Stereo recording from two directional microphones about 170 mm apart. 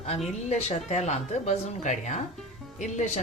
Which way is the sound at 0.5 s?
40° left (ahead or behind).